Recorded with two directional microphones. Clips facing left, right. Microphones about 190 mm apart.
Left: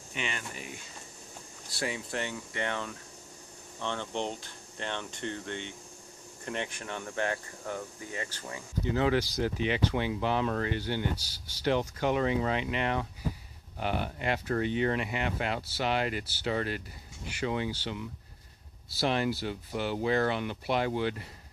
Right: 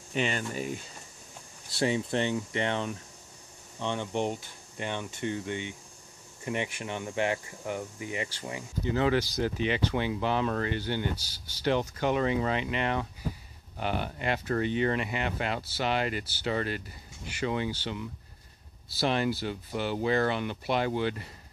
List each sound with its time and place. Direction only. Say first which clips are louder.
0.1 s speech: right 8 dB; 35° right (ahead or behind)
1.8 s speech: right 7 dB; 25° right (ahead or behind)
8.9 s speech: right 1 dB; 10° left (ahead or behind)
18.9 s speech: right 1 dB; 10° left (ahead or behind)